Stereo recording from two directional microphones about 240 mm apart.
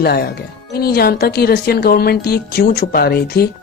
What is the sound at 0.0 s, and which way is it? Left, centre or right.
Speech, left.